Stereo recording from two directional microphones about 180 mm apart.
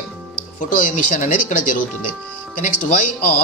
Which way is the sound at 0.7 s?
45° left (ahead or behind).